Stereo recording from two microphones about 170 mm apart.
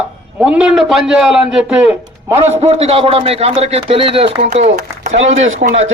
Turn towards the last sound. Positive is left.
turn(degrees=-50)  # may be behind; listen again after turning